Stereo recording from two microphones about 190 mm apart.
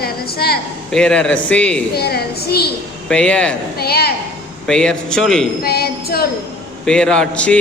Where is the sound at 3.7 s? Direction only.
55° left (ahead or behind).